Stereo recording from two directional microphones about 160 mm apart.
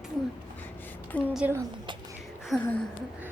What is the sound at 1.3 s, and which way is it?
Speech, 10° right (ahead or behind).